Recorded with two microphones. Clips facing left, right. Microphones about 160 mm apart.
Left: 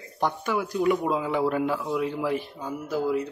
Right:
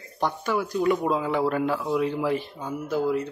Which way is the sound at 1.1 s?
10° left (ahead or behind).